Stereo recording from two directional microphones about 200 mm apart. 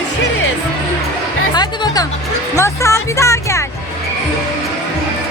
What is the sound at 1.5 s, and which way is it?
Music, 20° left (ahead or behind).